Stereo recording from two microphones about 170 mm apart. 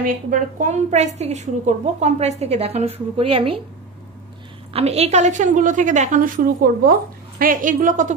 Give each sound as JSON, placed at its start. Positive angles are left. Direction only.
{"t": 0.0, "sound": "a woman's voice", "side_deg": -50}
{"t": 4.7, "sound": "a woman's voice", "side_deg": -35}